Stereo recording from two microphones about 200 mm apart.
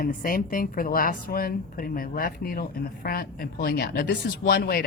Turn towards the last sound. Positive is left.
turn(degrees=50)  # may be behind; listen again after turning